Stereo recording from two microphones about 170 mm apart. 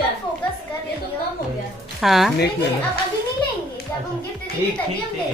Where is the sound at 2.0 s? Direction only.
Centre (ahead or behind).